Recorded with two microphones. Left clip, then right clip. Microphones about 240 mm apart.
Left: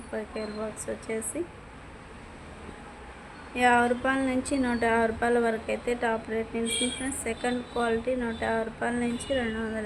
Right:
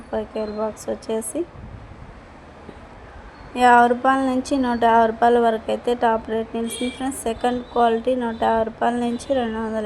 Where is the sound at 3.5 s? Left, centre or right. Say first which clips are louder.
Right 9 dB; centre.